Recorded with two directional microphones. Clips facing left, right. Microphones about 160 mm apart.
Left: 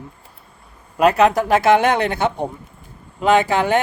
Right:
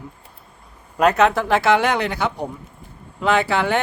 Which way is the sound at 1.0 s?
35° left (ahead or behind).